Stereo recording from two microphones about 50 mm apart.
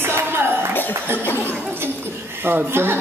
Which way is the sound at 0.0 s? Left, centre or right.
Right.